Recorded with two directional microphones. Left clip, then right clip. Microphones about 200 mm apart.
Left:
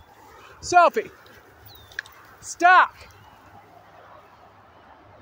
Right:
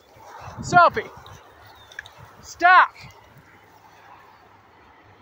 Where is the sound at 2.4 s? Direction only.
25° left (ahead or behind).